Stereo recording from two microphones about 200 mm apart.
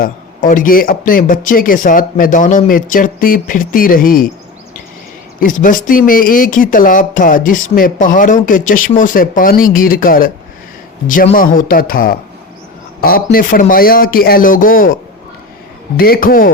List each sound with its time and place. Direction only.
0.0 s speech: 40° left (ahead or behind)
5.4 s speech: 40° left (ahead or behind)
11.3 s a man's voice: 45° left (ahead or behind)
16.0 s speech: 50° left (ahead or behind)